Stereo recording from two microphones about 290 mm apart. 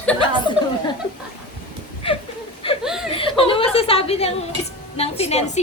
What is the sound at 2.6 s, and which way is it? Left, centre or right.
Chuckle, centre.